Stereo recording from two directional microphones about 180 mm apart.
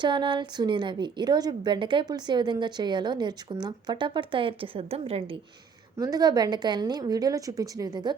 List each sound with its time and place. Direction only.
0.0 s a woman's voice: 25° right (ahead or behind)
6.0 s a woman's voice: 20° right (ahead or behind)